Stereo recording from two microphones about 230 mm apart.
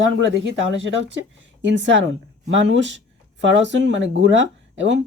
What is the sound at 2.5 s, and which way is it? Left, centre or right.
Speech, right.